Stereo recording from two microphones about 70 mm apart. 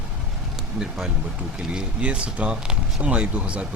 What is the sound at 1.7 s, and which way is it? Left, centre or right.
Speech, centre.